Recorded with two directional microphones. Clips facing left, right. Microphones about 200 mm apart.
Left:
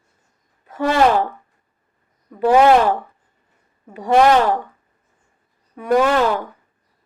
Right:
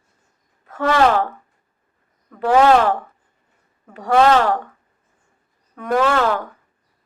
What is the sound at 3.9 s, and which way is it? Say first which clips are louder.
Speech: left 1 dB; 15° left (ahead or behind).